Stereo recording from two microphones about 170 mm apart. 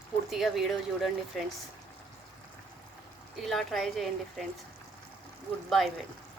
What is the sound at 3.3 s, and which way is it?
Speech, centre (ahead or behind).